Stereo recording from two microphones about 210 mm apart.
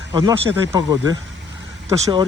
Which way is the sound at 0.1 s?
20° right (ahead or behind).